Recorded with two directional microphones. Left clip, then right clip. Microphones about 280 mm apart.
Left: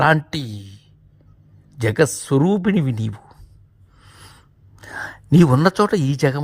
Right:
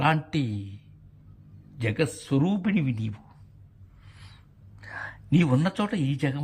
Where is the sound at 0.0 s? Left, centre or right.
Centre.